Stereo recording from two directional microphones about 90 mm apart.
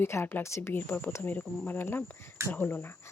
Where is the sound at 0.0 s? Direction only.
25° left (ahead or behind).